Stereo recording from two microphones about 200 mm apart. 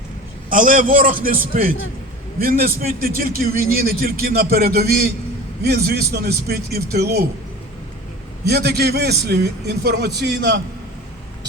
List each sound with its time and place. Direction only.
0.5 s a man's voice: 40° right (ahead or behind)
8.4 s a man's voice: 55° right (ahead or behind)